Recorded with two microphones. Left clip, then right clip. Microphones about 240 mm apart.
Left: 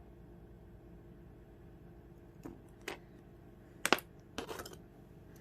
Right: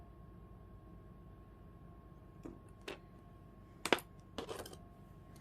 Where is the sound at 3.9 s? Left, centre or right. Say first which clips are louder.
Left 1 dB; centre.